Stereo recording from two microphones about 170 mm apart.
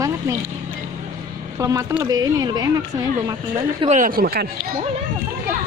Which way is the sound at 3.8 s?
45° right (ahead or behind).